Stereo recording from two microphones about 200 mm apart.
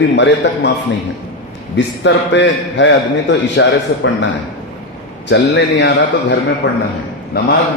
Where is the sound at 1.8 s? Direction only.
65° left (ahead or behind).